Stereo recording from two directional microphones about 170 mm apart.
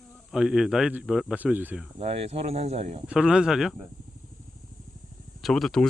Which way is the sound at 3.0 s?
5° right (ahead or behind).